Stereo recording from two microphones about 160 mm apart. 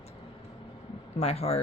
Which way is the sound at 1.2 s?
40° left (ahead or behind).